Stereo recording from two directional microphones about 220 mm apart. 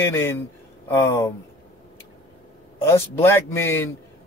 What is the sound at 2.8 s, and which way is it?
Speech, 10° left (ahead or behind).